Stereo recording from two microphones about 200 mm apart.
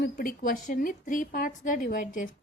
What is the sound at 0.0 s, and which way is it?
A woman's voice, 45° left (ahead or behind).